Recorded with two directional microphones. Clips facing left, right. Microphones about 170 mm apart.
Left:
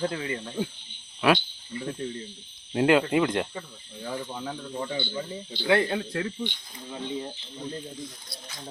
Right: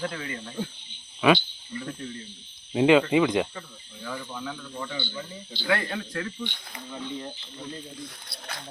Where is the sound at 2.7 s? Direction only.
Centre (ahead or behind).